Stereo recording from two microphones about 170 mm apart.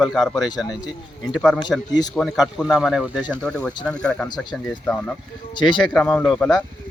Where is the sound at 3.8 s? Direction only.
5° left (ahead or behind).